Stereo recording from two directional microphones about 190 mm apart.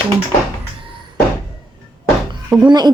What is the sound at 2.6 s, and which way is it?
Speech, 20° right (ahead or behind).